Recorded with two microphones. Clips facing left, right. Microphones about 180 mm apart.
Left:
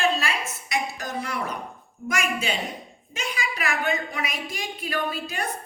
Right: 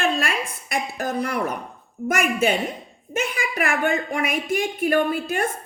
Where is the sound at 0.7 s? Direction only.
55° right (ahead or behind).